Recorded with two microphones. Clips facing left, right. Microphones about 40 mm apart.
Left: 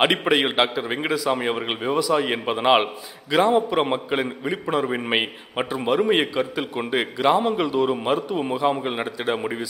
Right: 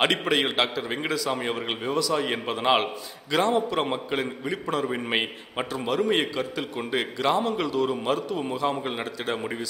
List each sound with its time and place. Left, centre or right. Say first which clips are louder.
0.0 s a man's voice: left 4 dB; centre